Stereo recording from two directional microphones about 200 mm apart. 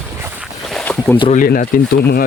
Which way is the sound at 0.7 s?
5° left (ahead or behind).